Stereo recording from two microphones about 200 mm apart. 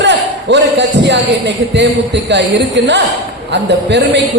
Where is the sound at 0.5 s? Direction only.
60° right (ahead or behind).